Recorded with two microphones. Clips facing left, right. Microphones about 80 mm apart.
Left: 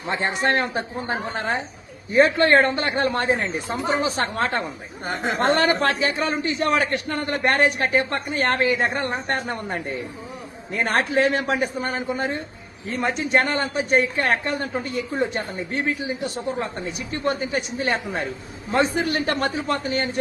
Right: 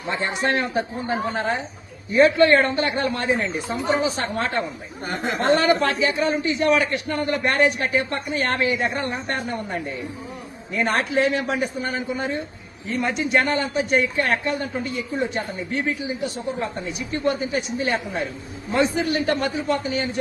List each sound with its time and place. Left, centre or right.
0.1 s a man's voice: left
5.0 s speech: left
6.1 s a man's voice: left